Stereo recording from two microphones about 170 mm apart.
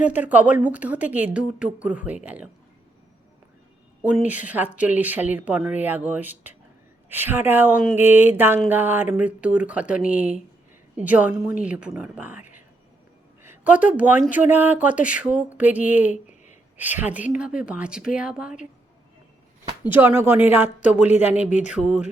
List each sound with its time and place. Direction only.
0.0 s a woman's voice: 10° right (ahead or behind)
4.0 s a woman's voice: 10° right (ahead or behind)
19.6 s a woman's voice: 10° right (ahead or behind)